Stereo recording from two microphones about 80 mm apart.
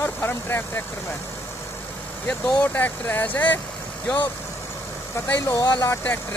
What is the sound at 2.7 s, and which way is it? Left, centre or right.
Speech, left.